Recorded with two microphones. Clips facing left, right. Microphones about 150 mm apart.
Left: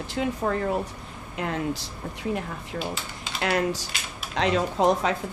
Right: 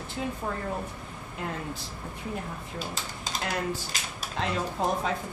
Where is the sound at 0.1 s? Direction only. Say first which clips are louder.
Left 7 dB; 90° left.